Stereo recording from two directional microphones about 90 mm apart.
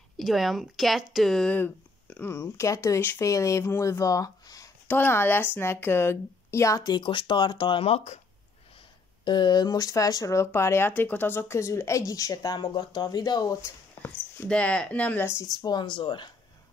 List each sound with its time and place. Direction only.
0.2 s a woman's voice: centre (ahead or behind)
1.5 s a sound: 20° left (ahead or behind)
2.3 s speech: 30° left (ahead or behind)
4.8 s speech: 25° left (ahead or behind)
6.8 s speech: 55° left (ahead or behind)
9.2 s speech: 60° left (ahead or behind); by 13.6 s 45° left (ahead or behind)
14.5 s speech: 10° left (ahead or behind)
15.5 s speech: 50° left (ahead or behind)